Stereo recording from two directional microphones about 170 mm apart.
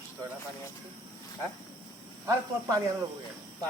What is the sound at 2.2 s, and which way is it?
Speech, 20° right (ahead or behind).